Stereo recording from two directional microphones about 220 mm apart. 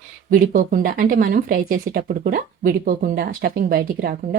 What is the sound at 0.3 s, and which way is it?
Speech, 40° right (ahead or behind).